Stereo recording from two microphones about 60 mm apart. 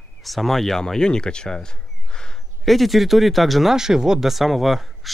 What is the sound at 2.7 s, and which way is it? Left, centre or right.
Speech, centre.